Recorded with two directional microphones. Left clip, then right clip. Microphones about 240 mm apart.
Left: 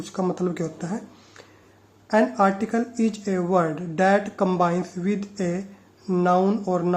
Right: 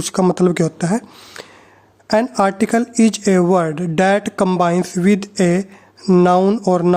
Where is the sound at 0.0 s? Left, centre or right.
Right.